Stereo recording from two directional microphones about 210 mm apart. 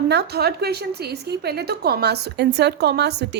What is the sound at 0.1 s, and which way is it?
A woman's voice, 50° right (ahead or behind).